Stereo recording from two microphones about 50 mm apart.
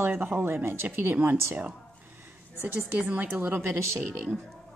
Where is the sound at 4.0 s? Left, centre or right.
Right.